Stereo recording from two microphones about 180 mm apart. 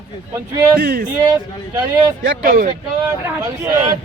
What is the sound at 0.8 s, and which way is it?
Speech, 55° right (ahead or behind).